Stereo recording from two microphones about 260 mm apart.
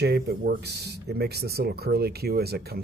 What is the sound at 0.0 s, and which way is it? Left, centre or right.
Speech, right.